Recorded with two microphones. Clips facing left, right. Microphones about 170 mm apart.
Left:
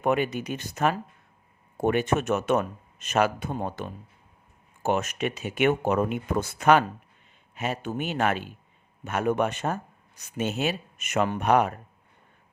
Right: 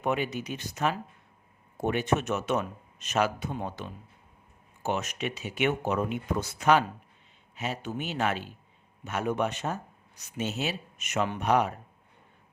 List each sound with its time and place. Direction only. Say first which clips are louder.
0.0 s speech: left 4 dB; 55° left (ahead or behind)